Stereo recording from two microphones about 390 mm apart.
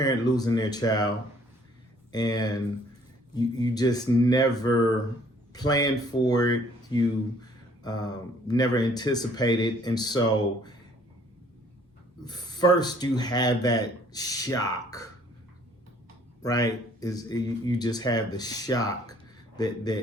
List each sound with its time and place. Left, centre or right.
0.0 s speech: centre
2.1 s speech: centre
12.2 s speech: centre
16.4 s speech: centre